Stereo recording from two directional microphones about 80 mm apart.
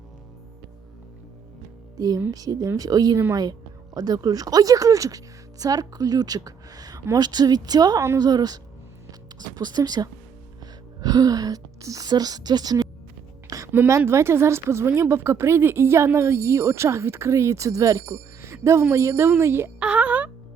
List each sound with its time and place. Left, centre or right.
2.0 s a woman's voice: right
13.7 s speech: right
19.8 s music: centre